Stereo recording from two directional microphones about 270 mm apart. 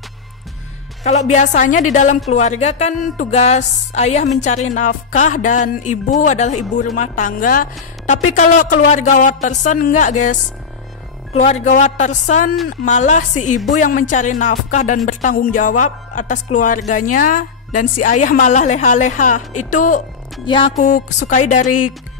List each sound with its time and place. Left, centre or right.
1.0 s speech: left
11.3 s speech: left
20.4 s speech: centre
21.6 s speech: left